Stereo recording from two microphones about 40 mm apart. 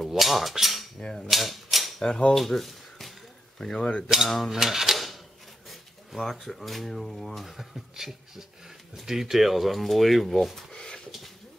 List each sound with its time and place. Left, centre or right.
0.1 s speech: centre
0.9 s speech: centre
1.3 s typewriter: centre
2.0 s speech: centre
2.3 s speech: centre
3.5 s speech: centre
4.3 s speech: centre
4.6 s speech: centre
4.9 s a sound: centre
5.7 s speech: centre
7.4 s speech: centre